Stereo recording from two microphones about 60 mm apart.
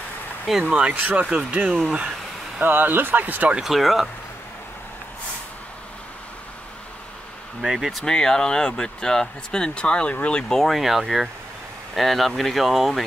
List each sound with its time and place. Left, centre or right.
0.7 s speech: right
2.6 s speech: right
3.5 s speech: centre
7.6 s speech: centre
8.0 s speech: centre
10.5 s speech: centre